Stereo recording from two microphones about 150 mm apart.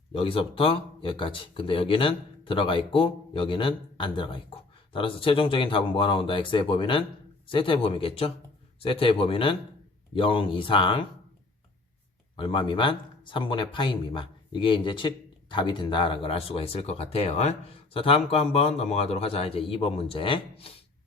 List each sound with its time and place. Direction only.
0.1 s speech: 35° left (ahead or behind)
12.4 s speech: 35° left (ahead or behind)